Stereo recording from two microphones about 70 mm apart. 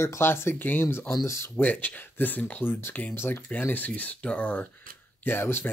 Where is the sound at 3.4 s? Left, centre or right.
Left.